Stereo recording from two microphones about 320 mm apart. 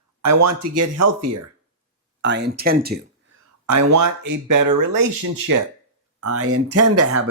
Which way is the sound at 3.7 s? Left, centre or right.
Right.